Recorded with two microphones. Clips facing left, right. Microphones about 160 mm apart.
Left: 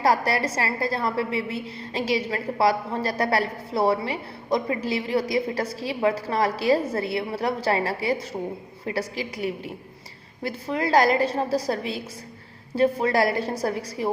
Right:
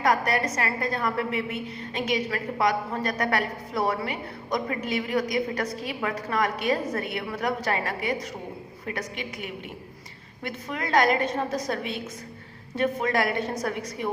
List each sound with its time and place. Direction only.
0.0 s a woman's voice: 30° left (ahead or behind)